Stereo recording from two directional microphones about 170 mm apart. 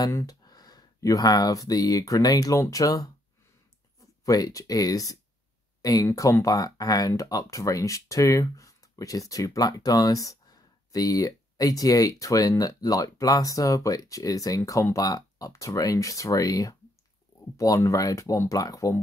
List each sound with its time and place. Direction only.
0.0 s speech: 20° left (ahead or behind)
4.2 s speech: 20° left (ahead or behind)